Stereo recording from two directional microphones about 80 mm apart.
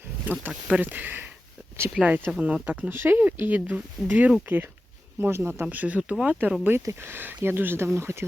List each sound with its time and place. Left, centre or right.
0.3 s speech: right
2.9 s speech: right
6.8 s speech: right